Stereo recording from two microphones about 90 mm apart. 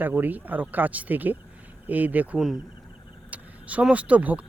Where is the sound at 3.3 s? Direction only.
15° right (ahead or behind).